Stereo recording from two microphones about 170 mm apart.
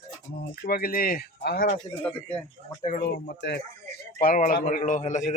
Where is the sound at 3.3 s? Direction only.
70° left (ahead or behind).